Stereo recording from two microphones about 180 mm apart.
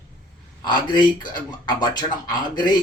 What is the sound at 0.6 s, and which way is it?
Speech, 25° left (ahead or behind).